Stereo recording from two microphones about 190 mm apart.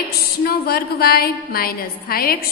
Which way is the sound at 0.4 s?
55° left (ahead or behind).